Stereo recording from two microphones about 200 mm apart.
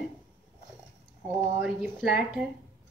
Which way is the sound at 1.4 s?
5° right (ahead or behind).